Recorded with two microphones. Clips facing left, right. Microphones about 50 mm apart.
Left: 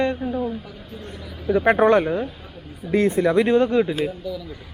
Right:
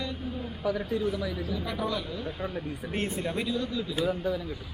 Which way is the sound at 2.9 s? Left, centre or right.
Left.